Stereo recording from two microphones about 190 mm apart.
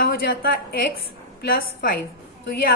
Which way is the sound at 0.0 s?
55° left (ahead or behind).